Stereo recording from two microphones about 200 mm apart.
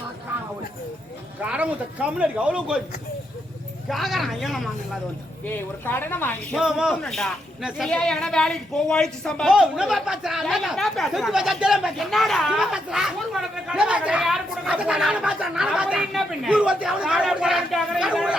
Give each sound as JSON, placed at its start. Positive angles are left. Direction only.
{"t": 1.4, "sound": "speech", "side_deg": -5}
{"t": 3.8, "sound": "speech", "side_deg": 0}
{"t": 5.8, "sound": "speech", "side_deg": 10}
{"t": 6.6, "sound": "speech", "side_deg": -5}